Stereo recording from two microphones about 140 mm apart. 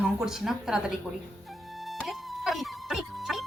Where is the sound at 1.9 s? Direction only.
Centre (ahead or behind).